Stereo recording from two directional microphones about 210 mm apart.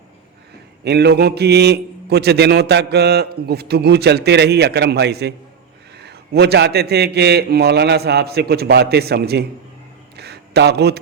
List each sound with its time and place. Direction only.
0.9 s a man's voice: 50° right (ahead or behind)